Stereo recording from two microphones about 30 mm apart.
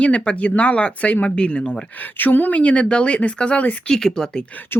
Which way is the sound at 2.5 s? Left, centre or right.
Left.